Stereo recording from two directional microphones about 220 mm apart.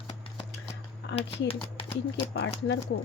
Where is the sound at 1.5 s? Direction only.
25° left (ahead or behind).